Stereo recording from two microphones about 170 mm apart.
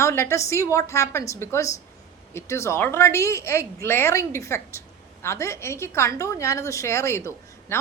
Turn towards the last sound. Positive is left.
turn(degrees=15)  # may be behind; listen again after turning